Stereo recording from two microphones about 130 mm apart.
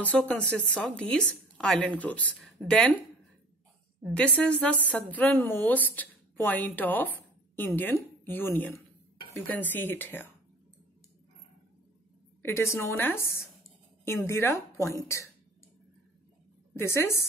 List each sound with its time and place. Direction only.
0.0 s a woman's voice: 10° left (ahead or behind)
4.1 s a woman's voice: 10° left (ahead or behind)
12.4 s a woman's voice: 20° left (ahead or behind)
16.7 s a woman's voice: 20° left (ahead or behind)